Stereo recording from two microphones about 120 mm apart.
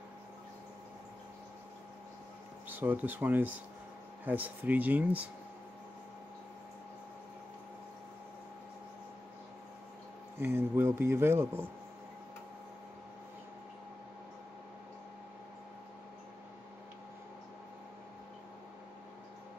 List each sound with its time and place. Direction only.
2.7 s speech: 15° right (ahead or behind)
10.4 s speech: 20° right (ahead or behind)